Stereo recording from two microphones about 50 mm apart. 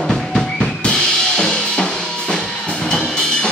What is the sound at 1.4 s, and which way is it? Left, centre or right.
Drum kit, centre.